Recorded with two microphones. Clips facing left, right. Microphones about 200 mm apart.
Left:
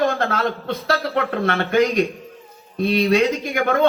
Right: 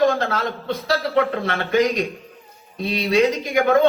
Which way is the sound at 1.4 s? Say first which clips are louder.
Left 1 dB; 55° left (ahead or behind).